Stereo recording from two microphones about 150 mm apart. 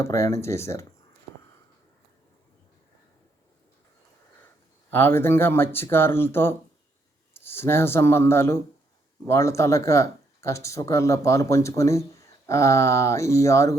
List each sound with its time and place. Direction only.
0.0 s speech: 20° left (ahead or behind)
4.9 s speech: 15° left (ahead or behind)